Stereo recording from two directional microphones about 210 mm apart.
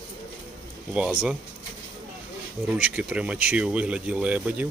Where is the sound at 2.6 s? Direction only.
5° right (ahead or behind).